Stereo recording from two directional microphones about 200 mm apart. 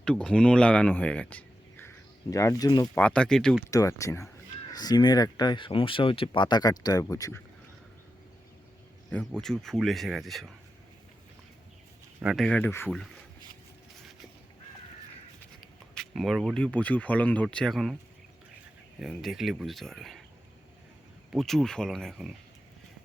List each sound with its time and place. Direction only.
0.0 s speech: 5° left (ahead or behind); by 2.9 s 20° left (ahead or behind)
2.9 s speech: 5° left (ahead or behind)
3.7 s speech: 15° left (ahead or behind)
9.0 s speech: 5° left (ahead or behind)
12.2 s speech: centre (ahead or behind)
16.0 s speech: centre (ahead or behind)
18.9 s speech: centre (ahead or behind)
21.3 s speech: centre (ahead or behind)